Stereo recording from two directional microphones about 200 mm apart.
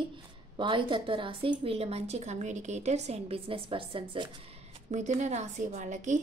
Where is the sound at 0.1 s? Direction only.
25° right (ahead or behind).